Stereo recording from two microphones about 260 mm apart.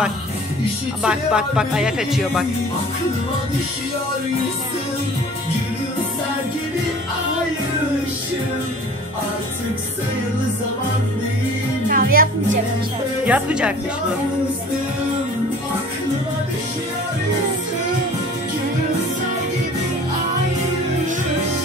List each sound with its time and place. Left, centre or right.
1.0 s speech: centre
11.9 s music: right
13.2 s speech: centre